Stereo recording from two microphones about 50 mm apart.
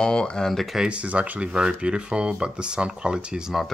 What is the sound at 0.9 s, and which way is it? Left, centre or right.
Speech, right.